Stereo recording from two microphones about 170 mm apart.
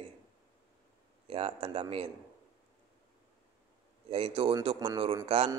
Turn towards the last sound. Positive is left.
turn(degrees=-35)  # may be behind; listen again after turning